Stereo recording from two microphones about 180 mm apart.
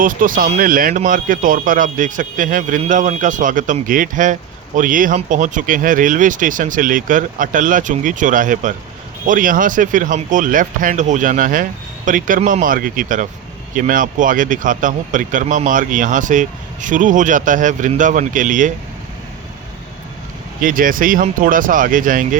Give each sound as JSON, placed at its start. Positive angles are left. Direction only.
{"t": 0.0, "sound": "speech", "side_deg": -50}
{"t": 20.6, "sound": "speech", "side_deg": -50}